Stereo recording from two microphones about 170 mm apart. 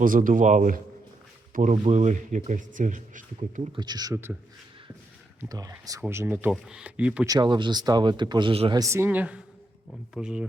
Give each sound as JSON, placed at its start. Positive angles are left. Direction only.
{"t": 0.0, "sound": "speech", "side_deg": -55}
{"t": 3.8, "sound": "speech", "side_deg": -25}
{"t": 5.4, "sound": "speech", "side_deg": -20}
{"t": 7.3, "sound": "speech", "side_deg": -25}
{"t": 8.8, "sound": "speech", "side_deg": -15}